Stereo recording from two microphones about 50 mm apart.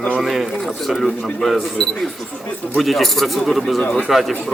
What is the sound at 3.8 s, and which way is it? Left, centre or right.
Speech, left.